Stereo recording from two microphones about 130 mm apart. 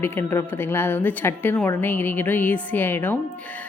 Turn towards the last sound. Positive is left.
turn(degrees=15)  # may be behind; listen again after turning